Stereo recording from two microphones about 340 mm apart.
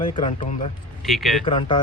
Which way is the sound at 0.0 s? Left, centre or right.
Centre.